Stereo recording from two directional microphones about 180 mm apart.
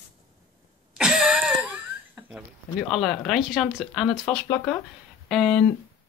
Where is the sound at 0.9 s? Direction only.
5° right (ahead or behind).